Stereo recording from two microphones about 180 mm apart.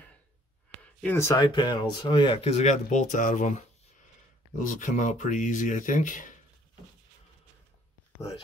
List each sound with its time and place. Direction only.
1.0 s speech: 15° left (ahead or behind); by 3.5 s 45° left (ahead or behind)
4.6 s speech: 45° left (ahead or behind)